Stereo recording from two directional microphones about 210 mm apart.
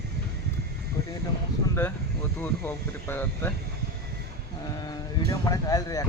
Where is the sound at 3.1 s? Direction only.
10° left (ahead or behind).